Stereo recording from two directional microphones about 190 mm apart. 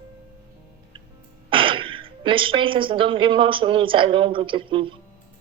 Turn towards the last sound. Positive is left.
turn(degrees=-25)  # may be behind; listen again after turning